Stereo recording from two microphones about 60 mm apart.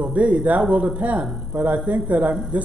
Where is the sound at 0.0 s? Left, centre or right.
Right.